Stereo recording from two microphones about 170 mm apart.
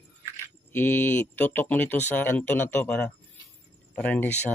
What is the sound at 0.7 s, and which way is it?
Speech, 10° left (ahead or behind).